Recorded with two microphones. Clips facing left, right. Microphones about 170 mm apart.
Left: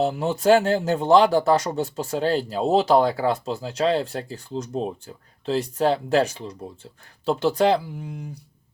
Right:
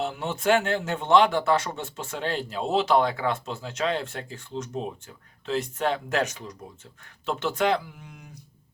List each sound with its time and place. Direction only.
0.0 s speech: 35° left (ahead or behind)